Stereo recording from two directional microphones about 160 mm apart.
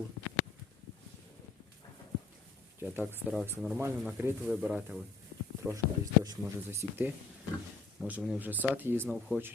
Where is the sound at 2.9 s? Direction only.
10° right (ahead or behind).